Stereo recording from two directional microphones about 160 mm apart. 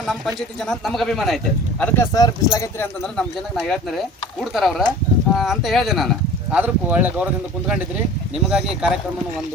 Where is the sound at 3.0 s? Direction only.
5° left (ahead or behind).